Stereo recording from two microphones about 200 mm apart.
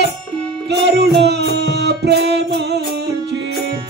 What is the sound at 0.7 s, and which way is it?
Music, 55° right (ahead or behind).